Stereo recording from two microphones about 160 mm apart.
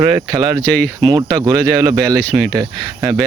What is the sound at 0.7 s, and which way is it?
Speech, 5° left (ahead or behind).